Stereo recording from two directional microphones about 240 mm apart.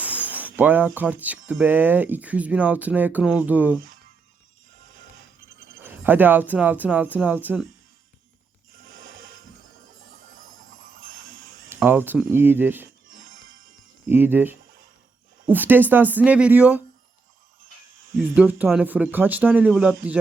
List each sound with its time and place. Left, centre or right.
0.0 s speech: centre
5.8 s speech: centre
8.8 s music: right
10.3 s music: right
11.7 s speech: centre
14.1 s speech: centre
18.3 s speech: centre